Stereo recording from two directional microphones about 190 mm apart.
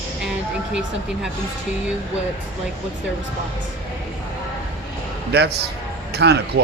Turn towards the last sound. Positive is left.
turn(degrees=-60)  # may be behind; listen again after turning